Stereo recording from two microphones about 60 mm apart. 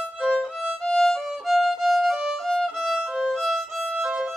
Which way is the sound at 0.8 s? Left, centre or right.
Centre.